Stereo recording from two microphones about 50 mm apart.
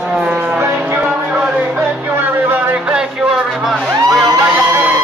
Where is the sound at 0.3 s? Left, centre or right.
Right.